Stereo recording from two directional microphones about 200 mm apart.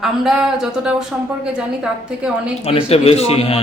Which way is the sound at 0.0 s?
Centre (ahead or behind).